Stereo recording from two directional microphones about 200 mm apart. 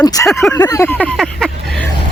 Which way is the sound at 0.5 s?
15° left (ahead or behind).